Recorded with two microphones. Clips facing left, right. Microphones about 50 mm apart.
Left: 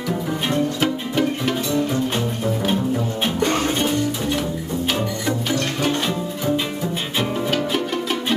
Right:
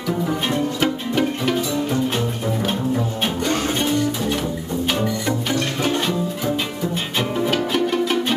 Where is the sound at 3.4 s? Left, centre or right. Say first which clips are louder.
Left 3 dB; left.